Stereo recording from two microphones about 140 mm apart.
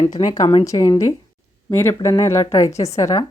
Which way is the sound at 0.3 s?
30° left (ahead or behind).